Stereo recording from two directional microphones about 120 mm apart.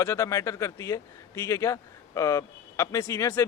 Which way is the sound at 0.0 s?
25° left (ahead or behind).